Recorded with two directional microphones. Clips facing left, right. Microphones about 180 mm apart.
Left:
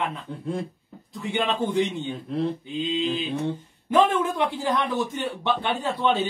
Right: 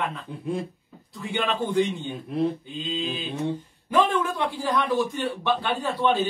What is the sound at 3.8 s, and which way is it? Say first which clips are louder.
A man's voice: left 2 dB; 25° left (ahead or behind).